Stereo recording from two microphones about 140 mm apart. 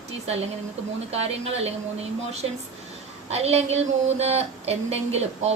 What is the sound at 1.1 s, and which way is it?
A woman's voice, 45° right (ahead or behind).